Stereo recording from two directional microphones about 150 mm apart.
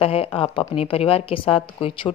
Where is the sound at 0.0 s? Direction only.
40° left (ahead or behind).